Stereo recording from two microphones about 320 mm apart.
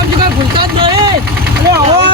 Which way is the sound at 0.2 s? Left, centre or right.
Centre.